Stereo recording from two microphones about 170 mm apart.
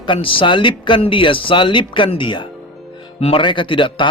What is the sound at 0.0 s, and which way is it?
A man's voice, 30° left (ahead or behind).